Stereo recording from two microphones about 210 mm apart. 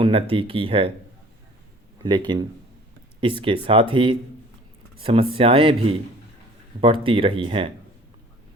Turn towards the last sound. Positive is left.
turn(degrees=-25)  # may be behind; listen again after turning